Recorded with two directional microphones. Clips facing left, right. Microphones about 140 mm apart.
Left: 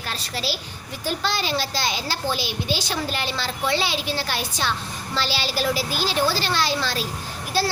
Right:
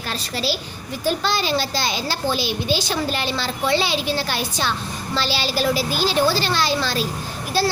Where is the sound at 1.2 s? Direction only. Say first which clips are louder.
Right 3 dB; 30° right (ahead or behind).